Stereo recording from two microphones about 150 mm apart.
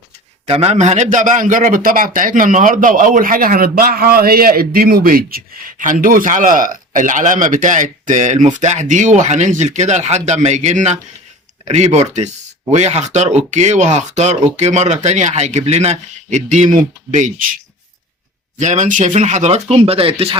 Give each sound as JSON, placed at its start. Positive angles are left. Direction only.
{"t": 0.4, "sound": "a man's voice", "side_deg": -40}
{"t": 18.6, "sound": "speech", "side_deg": -55}